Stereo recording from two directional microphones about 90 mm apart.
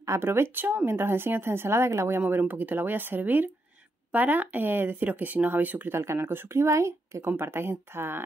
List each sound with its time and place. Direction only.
0.0 s speech: 30° right (ahead or behind)